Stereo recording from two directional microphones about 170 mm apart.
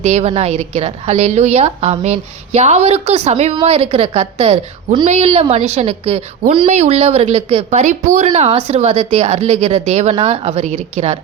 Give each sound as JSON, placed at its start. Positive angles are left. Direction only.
{"t": 0.0, "sound": "a woman's voice", "side_deg": -40}